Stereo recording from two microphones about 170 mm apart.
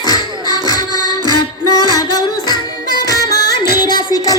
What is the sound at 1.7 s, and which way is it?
Music, 25° left (ahead or behind).